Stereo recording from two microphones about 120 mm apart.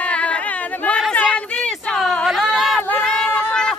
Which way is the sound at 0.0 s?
10° left (ahead or behind).